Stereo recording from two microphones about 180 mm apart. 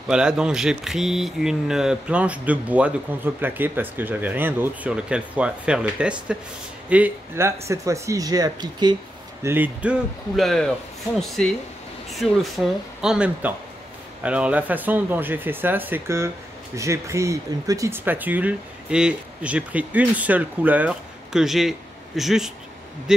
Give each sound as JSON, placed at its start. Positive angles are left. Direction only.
{"t": 0.1, "sound": "speech", "side_deg": -5}
{"t": 9.4, "sound": "speech", "side_deg": -10}